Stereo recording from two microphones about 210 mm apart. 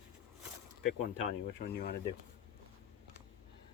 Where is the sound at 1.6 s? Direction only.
50° left (ahead or behind).